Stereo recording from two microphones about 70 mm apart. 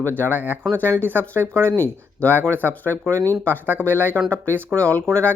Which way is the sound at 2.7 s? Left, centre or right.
Left.